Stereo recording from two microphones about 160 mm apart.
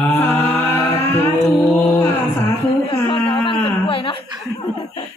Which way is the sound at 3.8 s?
35° left (ahead or behind).